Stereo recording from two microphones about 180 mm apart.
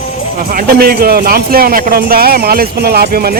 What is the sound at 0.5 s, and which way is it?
Speech, 55° right (ahead or behind).